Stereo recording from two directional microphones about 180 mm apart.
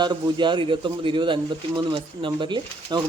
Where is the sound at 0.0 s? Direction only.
25° right (ahead or behind).